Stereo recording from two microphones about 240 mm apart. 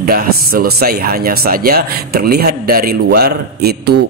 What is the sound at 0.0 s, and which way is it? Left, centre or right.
Speech, right.